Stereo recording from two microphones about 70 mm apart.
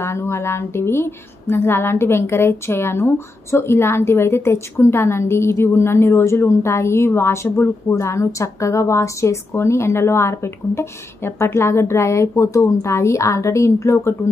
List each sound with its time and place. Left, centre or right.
0.0 s a woman's voice: left
7.4 s speech: left
7.9 s a woman's voice: left